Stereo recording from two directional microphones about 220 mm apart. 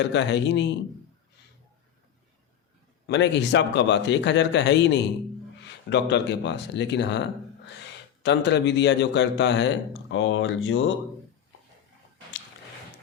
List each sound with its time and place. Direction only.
0.0 s speech: 55° left (ahead or behind)
3.1 s speech: 50° left (ahead or behind)